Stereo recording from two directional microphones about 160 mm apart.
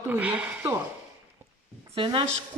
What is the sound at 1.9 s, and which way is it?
Speech, 30° right (ahead or behind).